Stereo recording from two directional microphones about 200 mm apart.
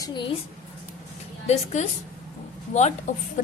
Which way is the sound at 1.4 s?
35° left (ahead or behind).